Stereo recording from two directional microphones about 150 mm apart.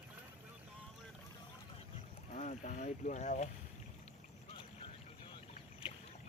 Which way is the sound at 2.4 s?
55° left (ahead or behind).